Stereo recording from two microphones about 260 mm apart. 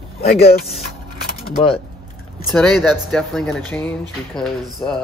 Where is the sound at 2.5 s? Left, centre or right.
Centre.